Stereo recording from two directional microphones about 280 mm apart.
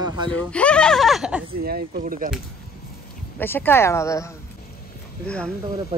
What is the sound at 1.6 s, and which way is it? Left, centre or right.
Speech, right.